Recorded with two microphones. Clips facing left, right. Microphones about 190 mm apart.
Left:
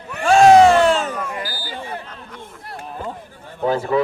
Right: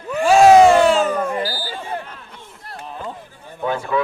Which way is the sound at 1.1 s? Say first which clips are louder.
Right 6 dB; 35° right (ahead or behind).